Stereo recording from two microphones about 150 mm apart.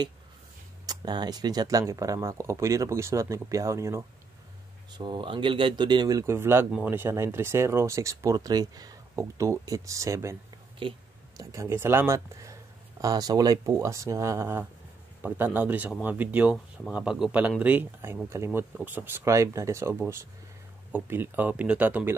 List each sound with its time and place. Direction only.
0.8 s speech: 30° right (ahead or behind)
4.9 s speech: 30° right (ahead or behind)
10.8 s a sound: 35° right (ahead or behind)
11.5 s speech: 15° right (ahead or behind)
16.5 s speech: 5° left (ahead or behind)